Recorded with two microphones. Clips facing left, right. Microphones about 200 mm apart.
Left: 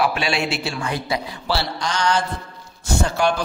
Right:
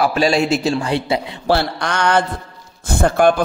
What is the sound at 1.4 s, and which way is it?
A man's voice, 55° right (ahead or behind).